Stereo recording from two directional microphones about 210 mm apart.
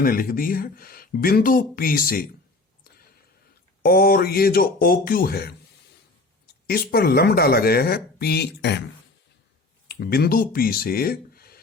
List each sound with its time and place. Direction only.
0.0 s speech: 45° left (ahead or behind)
3.8 s speech: 45° left (ahead or behind)
6.7 s speech: 45° left (ahead or behind)
9.9 s speech: 45° left (ahead or behind)